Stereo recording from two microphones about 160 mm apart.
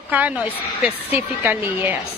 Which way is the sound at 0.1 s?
10° right (ahead or behind).